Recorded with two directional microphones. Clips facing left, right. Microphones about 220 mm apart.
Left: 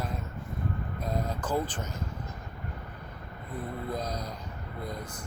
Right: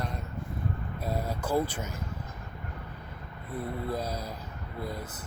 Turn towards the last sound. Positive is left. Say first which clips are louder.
# right 1 dB
turn(degrees=-5)  # may be behind; listen again after turning